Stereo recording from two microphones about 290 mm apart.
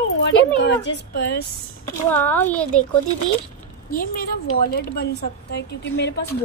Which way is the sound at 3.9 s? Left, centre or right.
Left.